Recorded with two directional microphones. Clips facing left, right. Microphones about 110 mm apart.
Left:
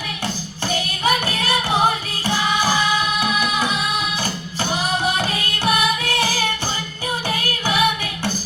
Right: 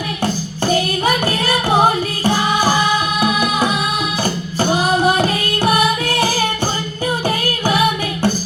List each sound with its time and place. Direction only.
0.2 s music: 45° right (ahead or behind)